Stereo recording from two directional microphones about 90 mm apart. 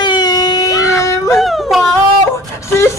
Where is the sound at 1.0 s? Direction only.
30° left (ahead or behind).